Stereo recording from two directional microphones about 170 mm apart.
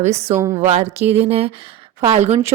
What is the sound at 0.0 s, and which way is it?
Speech, 40° right (ahead or behind).